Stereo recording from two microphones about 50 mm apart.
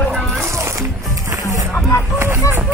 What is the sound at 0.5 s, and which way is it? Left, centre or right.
Music, right.